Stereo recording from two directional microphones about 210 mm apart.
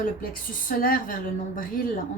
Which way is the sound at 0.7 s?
40° left (ahead or behind).